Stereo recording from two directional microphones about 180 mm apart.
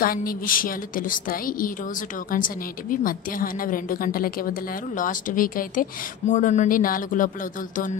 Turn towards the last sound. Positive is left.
turn(degrees=50)  # may be behind; listen again after turning